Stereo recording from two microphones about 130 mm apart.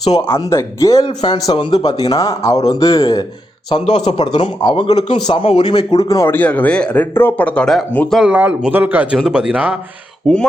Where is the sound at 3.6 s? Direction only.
40° left (ahead or behind).